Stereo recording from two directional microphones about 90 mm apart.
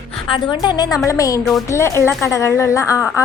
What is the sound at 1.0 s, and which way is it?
Speech, 40° left (ahead or behind).